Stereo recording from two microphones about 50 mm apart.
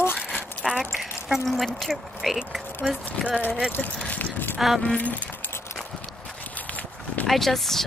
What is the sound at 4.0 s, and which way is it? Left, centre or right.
Keys jangling, left.